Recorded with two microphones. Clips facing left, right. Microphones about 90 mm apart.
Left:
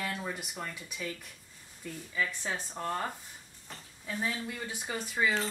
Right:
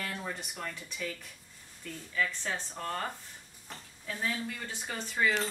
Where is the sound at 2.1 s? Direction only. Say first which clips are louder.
Right 1 dB; 15° left (ahead or behind).